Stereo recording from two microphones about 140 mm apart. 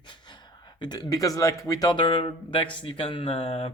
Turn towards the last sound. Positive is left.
turn(degrees=45)  # may be behind; listen again after turning